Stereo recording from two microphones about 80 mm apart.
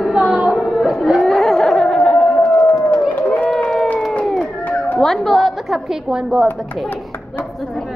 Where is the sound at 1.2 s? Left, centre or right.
Centre.